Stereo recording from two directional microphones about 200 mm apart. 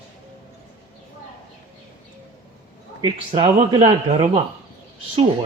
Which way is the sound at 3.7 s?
25° right (ahead or behind).